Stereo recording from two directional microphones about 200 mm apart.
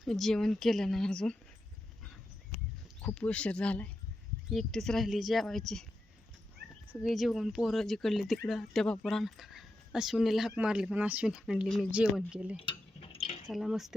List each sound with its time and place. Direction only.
0.0 s speech: centre (ahead or behind)
3.0 s speech: 5° left (ahead or behind)
7.0 s speech: centre (ahead or behind)
12.5 s a sound: 30° left (ahead or behind)
13.5 s speech: centre (ahead or behind)